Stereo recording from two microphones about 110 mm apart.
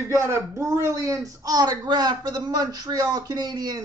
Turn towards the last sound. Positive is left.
turn(degrees=-35)  # may be behind; listen again after turning